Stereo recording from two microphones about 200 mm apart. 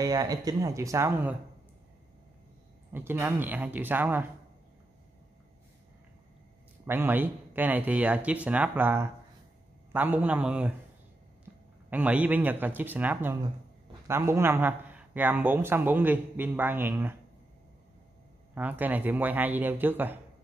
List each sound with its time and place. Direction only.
0.0 s a man's voice: 20° right (ahead or behind)
2.9 s a man's voice: 10° right (ahead or behind)
6.9 s a man's voice: 10° right (ahead or behind)
11.9 s a man's voice: 10° right (ahead or behind)
18.5 s a man's voice: 10° right (ahead or behind)